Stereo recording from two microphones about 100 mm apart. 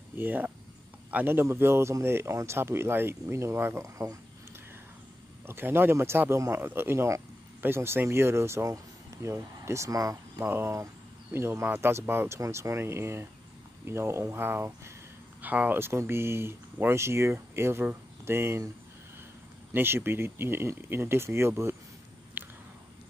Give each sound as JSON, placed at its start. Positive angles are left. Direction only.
{"t": 0.1, "sound": "speech", "side_deg": -20}
{"t": 5.5, "sound": "speech", "side_deg": -20}
{"t": 10.4, "sound": "speech", "side_deg": -25}
{"t": 19.7, "sound": "speech", "side_deg": -20}
{"t": 22.4, "sound": "biting", "side_deg": -20}